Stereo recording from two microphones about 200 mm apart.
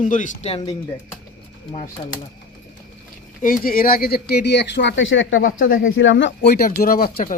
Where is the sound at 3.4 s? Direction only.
45° left (ahead or behind).